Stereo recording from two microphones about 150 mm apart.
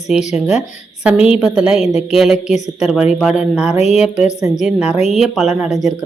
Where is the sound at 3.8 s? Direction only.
45° left (ahead or behind).